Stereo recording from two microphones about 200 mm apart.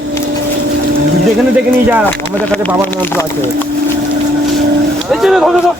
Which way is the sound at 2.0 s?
5° left (ahead or behind).